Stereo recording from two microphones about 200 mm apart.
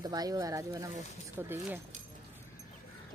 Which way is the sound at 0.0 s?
20° right (ahead or behind).